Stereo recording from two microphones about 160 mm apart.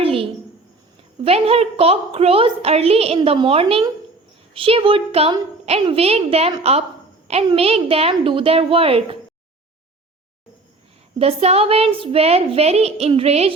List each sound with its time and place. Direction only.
0.0 s a sound: 35° right (ahead or behind)
1.2 s a woman's voice: 40° right (ahead or behind)
11.2 s a woman's voice: 40° right (ahead or behind)